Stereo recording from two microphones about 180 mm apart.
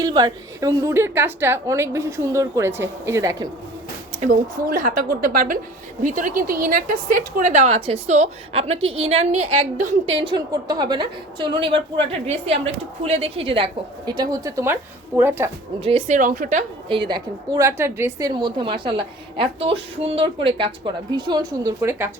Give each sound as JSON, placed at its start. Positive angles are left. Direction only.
{"t": 0.0, "sound": "a woman's voice", "side_deg": -25}
{"t": 4.2, "sound": "a woman's voice", "side_deg": -45}
{"t": 10.2, "sound": "a woman's voice", "side_deg": -25}
{"t": 15.8, "sound": "a woman's voice", "side_deg": -35}
{"t": 17.1, "sound": "a woman's voice", "side_deg": -25}
{"t": 18.3, "sound": "a woman's voice", "side_deg": -25}